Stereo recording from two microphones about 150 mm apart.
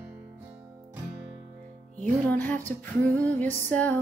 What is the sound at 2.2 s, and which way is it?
Music, 10° left (ahead or behind).